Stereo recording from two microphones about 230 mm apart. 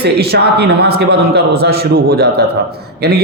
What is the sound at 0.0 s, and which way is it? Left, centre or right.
A man's voice, right.